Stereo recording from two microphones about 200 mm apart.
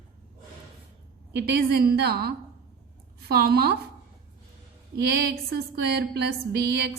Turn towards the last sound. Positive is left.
turn(degrees=-55)  # may be behind; listen again after turning